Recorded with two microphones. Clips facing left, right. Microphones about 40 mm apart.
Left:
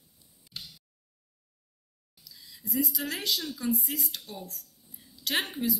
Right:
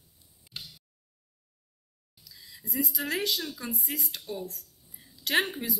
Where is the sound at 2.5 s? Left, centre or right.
Right.